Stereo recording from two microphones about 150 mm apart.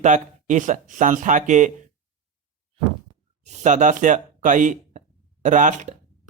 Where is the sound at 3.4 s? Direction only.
50° right (ahead or behind).